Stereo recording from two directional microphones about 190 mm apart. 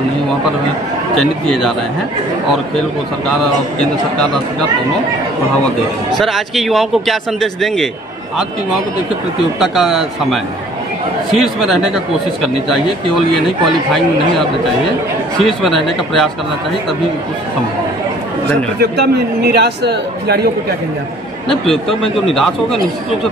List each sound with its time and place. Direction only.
1.1 s speech: centre (ahead or behind)
6.1 s speech: centre (ahead or behind)
9.6 s speech: centre (ahead or behind)
15.3 s speech: centre (ahead or behind)
18.8 s speech: 60° right (ahead or behind)
21.5 s speech: centre (ahead or behind)